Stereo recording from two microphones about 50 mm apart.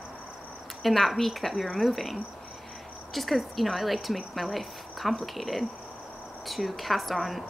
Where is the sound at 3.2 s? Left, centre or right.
Centre.